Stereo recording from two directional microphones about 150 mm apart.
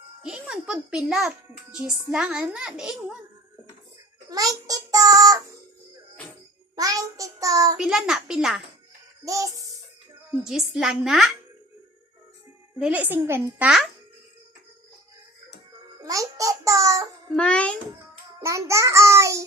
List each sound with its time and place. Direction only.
0.2 s a child's voice: 5° right (ahead or behind)
4.3 s a child's voice: 25° right (ahead or behind)
6.7 s a child's voice: 25° right (ahead or behind)
7.8 s a child's voice: 5° right (ahead or behind)
9.2 s a child's voice: 20° right (ahead or behind)
10.4 s a child's voice: 5° right (ahead or behind)
12.8 s a woman's voice: 10° right (ahead or behind)
16.0 s a child's voice: 20° right (ahead or behind)
17.3 s a child's voice: 5° left (ahead or behind)
18.3 s a child's voice: 20° right (ahead or behind)